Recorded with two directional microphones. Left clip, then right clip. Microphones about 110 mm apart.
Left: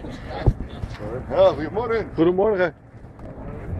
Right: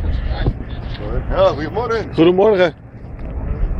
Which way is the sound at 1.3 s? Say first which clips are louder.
Right 2 dB; 35° left (ahead or behind).